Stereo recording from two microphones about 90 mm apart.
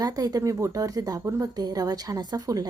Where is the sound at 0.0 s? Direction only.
45° right (ahead or behind).